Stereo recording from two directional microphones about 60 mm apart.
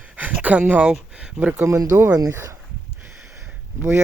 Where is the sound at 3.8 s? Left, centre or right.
Right.